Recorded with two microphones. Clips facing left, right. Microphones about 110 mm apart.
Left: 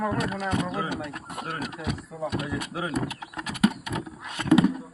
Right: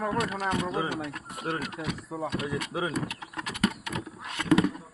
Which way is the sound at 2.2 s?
20° left (ahead or behind).